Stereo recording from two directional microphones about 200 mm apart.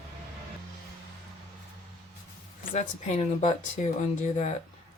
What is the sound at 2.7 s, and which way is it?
Speech, 35° left (ahead or behind).